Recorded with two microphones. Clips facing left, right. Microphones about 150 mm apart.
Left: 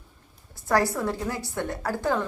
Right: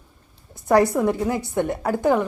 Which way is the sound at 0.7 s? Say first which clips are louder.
Right 7 dB; 20° right (ahead or behind).